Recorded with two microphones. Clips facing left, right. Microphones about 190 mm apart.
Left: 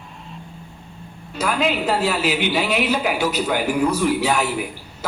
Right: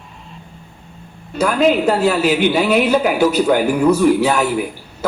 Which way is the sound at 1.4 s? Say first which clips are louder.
Right 7 dB; 45° right (ahead or behind).